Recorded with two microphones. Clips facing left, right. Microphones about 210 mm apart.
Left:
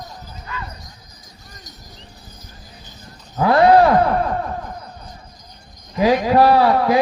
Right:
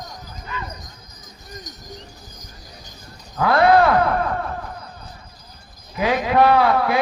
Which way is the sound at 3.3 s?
30° left (ahead or behind).